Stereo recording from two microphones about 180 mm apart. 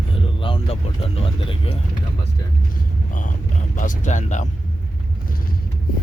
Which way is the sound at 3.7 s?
45° left (ahead or behind).